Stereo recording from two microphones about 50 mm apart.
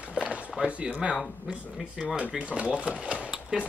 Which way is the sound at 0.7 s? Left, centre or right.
Right.